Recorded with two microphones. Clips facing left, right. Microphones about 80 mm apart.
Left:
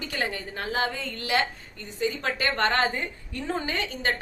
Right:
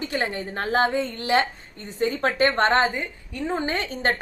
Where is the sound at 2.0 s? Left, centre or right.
Right; by 3.6 s centre.